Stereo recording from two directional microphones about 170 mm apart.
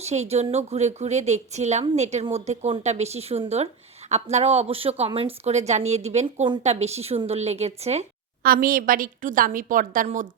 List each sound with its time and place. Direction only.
0.0 s speech: 40° right (ahead or behind)
8.4 s a woman's voice: 55° right (ahead or behind)